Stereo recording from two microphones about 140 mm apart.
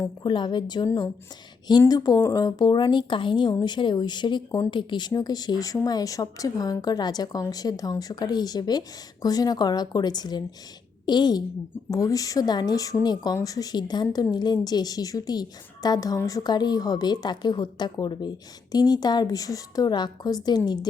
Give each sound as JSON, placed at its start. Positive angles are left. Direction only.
{"t": 0.2, "sound": "speech", "side_deg": 35}
{"t": 1.9, "sound": "a woman's voice", "side_deg": 25}